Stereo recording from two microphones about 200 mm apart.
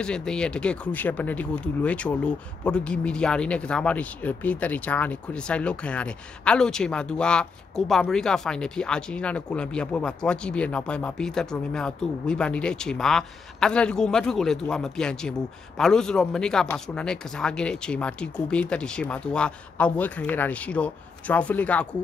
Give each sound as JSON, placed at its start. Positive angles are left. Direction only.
{"t": 0.0, "sound": "speech", "side_deg": 5}